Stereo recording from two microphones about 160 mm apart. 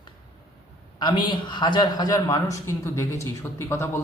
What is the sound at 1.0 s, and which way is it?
A man's voice, 30° left (ahead or behind).